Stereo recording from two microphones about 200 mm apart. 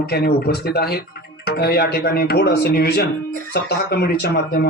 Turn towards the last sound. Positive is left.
turn(degrees=55)  # may be behind; listen again after turning